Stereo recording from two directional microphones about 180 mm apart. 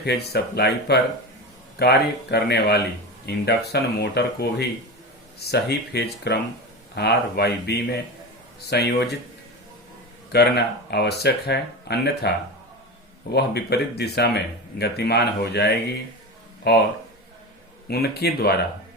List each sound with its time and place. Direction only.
0.0 s speech: 65° left (ahead or behind)
10.3 s speech: 65° left (ahead or behind)
13.3 s speech: 65° left (ahead or behind)
17.8 s speech: 60° left (ahead or behind)